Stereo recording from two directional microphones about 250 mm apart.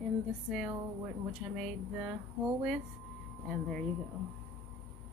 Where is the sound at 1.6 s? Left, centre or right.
Centre.